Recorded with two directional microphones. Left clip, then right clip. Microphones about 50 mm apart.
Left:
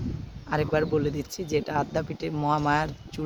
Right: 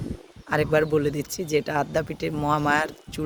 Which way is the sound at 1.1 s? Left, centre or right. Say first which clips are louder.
Right 3 dB; right.